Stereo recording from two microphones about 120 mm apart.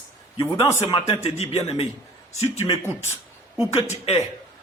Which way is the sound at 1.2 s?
60° left (ahead or behind).